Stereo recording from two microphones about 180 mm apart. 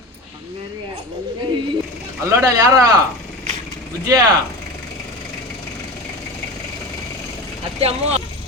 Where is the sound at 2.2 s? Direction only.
15° right (ahead or behind).